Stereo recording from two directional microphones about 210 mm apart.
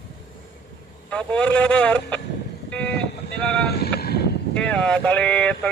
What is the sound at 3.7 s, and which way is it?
Boat, 50° left (ahead or behind).